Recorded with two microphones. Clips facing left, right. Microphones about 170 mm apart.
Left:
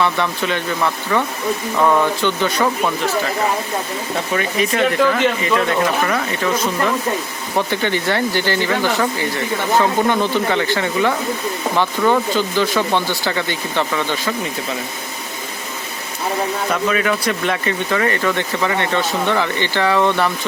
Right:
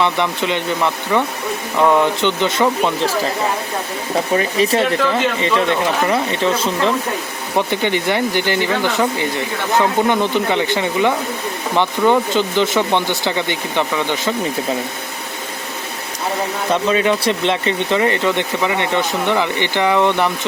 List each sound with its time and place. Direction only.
0.0 s speech: 20° right (ahead or behind)
4.4 s speech: 30° right (ahead or behind)
16.7 s speech: 25° right (ahead or behind)